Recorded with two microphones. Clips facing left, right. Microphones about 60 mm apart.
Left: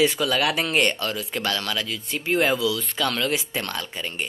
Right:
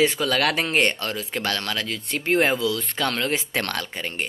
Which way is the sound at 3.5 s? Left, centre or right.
Right.